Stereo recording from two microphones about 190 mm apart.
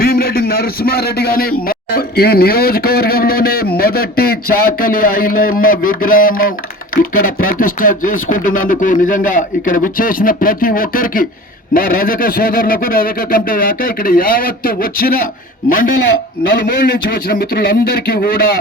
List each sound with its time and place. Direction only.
0.0 s a man's voice: 50° left (ahead or behind)
16.6 s a man's voice: 50° left (ahead or behind)